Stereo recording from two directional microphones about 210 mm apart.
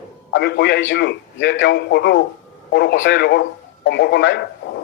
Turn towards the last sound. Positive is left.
turn(degrees=55)  # may be behind; listen again after turning